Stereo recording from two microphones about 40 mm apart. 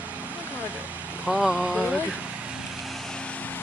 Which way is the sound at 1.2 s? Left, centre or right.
Right.